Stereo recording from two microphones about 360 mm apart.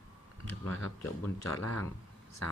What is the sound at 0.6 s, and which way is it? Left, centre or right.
Speech, left.